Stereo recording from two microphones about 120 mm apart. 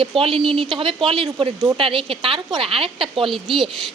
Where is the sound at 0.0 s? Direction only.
50° right (ahead or behind).